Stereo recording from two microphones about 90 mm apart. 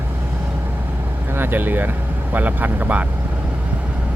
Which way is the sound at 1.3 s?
25° right (ahead or behind).